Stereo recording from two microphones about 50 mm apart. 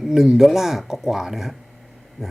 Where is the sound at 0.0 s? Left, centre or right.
Centre.